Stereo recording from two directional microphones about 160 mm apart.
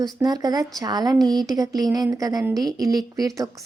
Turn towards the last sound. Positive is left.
turn(degrees=-25)  # may be behind; listen again after turning